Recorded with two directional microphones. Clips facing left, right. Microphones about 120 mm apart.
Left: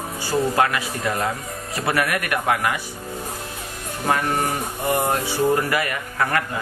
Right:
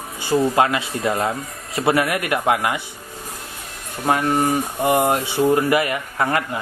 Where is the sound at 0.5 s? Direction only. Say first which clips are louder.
Right 2 dB; 25° right (ahead or behind).